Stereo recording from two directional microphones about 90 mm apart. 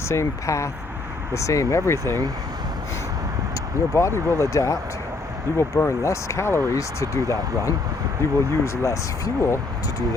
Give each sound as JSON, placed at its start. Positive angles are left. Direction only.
{"t": 0.1, "sound": "speech", "side_deg": 35}
{"t": 3.9, "sound": "speech", "side_deg": 30}